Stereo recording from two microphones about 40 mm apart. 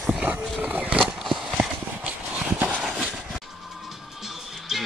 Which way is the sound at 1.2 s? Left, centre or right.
Centre.